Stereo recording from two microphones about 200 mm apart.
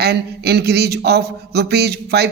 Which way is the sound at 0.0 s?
55° right (ahead or behind).